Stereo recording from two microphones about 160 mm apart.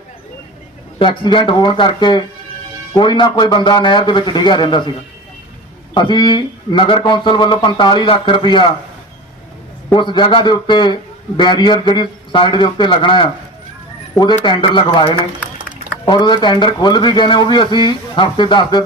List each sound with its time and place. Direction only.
0.9 s a man's voice: 30° left (ahead or behind)
5.9 s speech: 30° left (ahead or behind)
9.9 s a man's voice: 30° left (ahead or behind)